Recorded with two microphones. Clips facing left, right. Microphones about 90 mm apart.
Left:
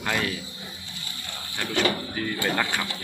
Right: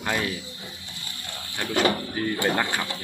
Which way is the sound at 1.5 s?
Centre (ahead or behind).